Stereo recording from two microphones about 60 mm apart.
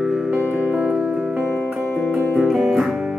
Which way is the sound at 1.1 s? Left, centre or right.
Right.